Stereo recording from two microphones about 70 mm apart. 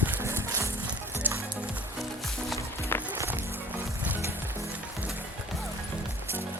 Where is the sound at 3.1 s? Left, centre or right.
Right.